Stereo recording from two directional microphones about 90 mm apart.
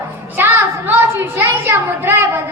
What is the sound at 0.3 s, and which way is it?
Music, 25° right (ahead or behind).